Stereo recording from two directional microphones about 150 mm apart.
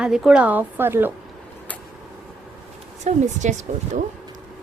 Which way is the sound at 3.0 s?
50° right (ahead or behind).